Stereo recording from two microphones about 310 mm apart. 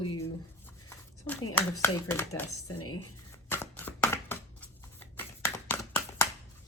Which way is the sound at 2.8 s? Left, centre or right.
Left.